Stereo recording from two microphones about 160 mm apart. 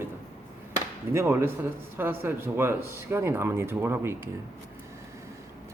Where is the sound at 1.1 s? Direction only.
15° right (ahead or behind).